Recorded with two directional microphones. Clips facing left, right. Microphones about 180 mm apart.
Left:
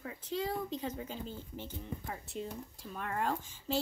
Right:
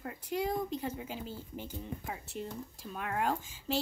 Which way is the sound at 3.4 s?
90° right.